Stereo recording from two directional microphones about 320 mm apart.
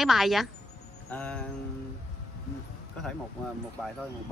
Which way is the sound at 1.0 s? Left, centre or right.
Centre.